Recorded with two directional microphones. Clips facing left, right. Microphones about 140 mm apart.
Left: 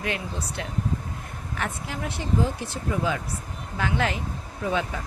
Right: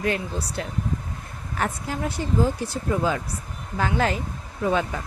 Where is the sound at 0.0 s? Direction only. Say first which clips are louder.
Right 4 dB; 35° right (ahead or behind).